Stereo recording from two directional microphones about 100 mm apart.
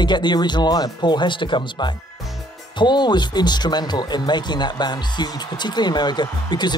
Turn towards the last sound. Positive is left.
turn(degrees=45)  # may be behind; listen again after turning